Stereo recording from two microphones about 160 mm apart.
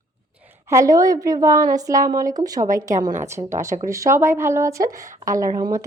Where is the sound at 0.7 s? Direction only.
20° right (ahead or behind).